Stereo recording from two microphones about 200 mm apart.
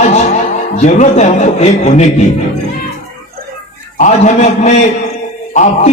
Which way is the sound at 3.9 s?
40° left (ahead or behind).